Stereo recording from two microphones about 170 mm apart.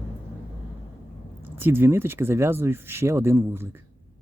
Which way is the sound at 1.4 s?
10° right (ahead or behind).